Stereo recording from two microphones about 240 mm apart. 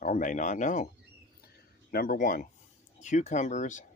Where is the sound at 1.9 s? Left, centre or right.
Left.